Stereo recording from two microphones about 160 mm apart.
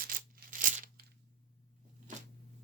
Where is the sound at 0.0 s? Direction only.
60° right (ahead or behind).